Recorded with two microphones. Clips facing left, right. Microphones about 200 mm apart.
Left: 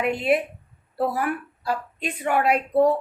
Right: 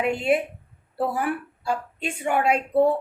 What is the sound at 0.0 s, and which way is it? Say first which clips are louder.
A woman's voice: even; 25° right (ahead or behind).